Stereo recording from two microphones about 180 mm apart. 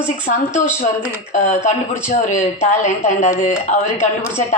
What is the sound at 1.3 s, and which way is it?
A woman's voice, 40° left (ahead or behind).